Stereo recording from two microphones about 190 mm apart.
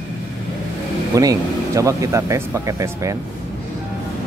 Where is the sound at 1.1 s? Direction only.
15° right (ahead or behind).